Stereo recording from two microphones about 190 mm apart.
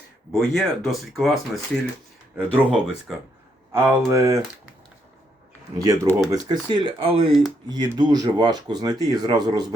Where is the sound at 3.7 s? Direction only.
15° right (ahead or behind).